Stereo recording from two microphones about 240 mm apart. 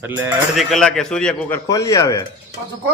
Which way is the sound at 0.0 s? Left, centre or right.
Centre.